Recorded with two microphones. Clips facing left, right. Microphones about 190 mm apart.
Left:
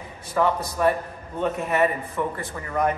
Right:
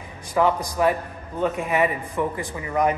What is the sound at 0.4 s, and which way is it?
A man's voice, 10° right (ahead or behind).